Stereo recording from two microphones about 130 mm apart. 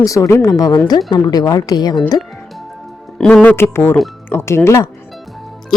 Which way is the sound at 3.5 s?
15° left (ahead or behind).